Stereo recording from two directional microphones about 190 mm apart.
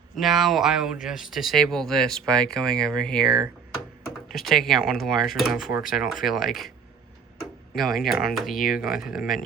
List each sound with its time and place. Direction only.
0.2 s speech: centre (ahead or behind)
4.4 s speech: centre (ahead or behind)
7.8 s speech: centre (ahead or behind)